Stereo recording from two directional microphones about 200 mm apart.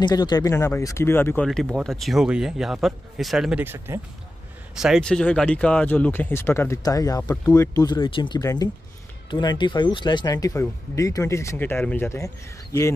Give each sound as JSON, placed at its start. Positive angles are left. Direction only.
{"t": 0.0, "sound": "speech", "side_deg": 20}